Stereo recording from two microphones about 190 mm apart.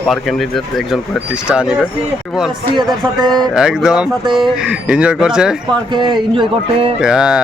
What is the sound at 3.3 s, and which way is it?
Speech, 5° right (ahead or behind).